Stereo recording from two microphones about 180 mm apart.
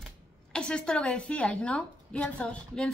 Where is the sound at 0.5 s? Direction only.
5° left (ahead or behind).